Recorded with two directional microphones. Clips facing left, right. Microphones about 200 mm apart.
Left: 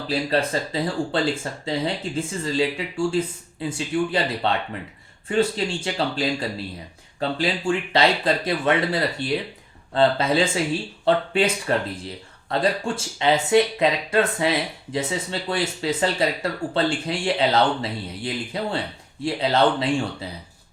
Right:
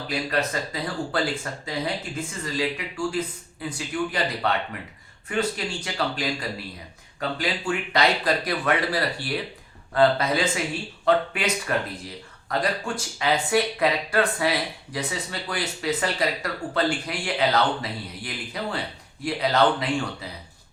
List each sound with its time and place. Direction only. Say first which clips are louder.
0.1 s speech: left 4 dB; 30° left (ahead or behind)